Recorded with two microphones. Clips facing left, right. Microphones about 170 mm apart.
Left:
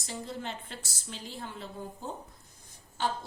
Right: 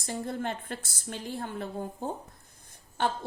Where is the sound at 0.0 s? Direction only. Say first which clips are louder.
Right 5 dB; 50° right (ahead or behind).